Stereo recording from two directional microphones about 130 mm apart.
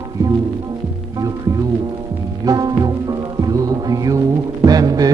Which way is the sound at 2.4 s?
30° right (ahead or behind).